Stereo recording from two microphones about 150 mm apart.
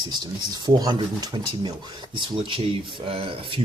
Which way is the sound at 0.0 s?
30° right (ahead or behind).